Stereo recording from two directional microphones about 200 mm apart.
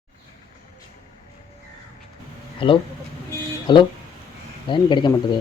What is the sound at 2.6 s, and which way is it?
Speech, 25° left (ahead or behind).